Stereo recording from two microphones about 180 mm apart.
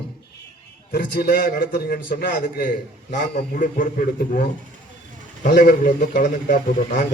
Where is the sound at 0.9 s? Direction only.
60° left (ahead or behind).